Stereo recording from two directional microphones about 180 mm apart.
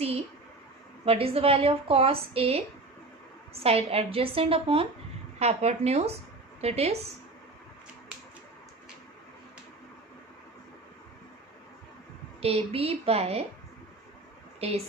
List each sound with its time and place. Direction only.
1.0 s a woman's voice: 35° right (ahead or behind)
12.4 s a woman's voice: 35° right (ahead or behind)
14.6 s a woman's voice: 35° right (ahead or behind)